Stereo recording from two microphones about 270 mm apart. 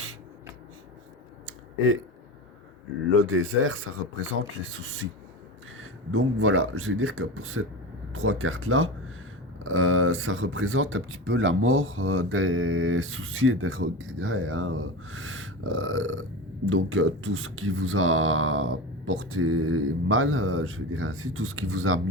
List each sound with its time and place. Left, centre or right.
3.1 s speech: right